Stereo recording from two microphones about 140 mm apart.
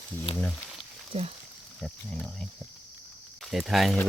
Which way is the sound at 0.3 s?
40° left (ahead or behind).